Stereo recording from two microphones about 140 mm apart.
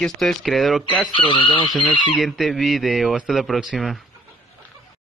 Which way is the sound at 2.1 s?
Centre (ahead or behind).